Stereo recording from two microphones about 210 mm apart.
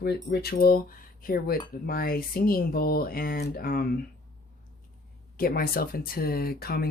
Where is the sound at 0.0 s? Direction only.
50° left (ahead or behind).